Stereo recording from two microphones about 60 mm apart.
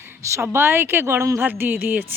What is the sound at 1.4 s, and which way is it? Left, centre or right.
Speech, right.